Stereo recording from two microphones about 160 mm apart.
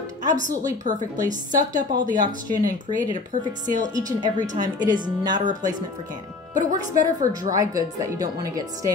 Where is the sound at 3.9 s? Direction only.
25° right (ahead or behind).